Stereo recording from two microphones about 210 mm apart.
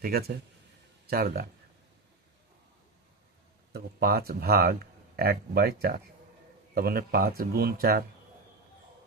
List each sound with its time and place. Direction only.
0.0 s speech: 45° right (ahead or behind)
3.7 s speech: 45° right (ahead or behind)